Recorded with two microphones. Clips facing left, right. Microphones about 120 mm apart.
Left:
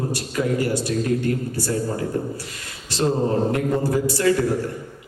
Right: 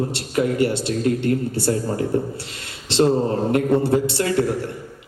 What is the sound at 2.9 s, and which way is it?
A man's voice, 25° right (ahead or behind).